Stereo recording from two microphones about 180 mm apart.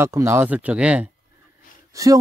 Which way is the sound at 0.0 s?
15° right (ahead or behind).